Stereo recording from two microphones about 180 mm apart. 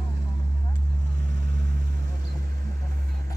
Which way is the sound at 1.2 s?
75° right (ahead or behind).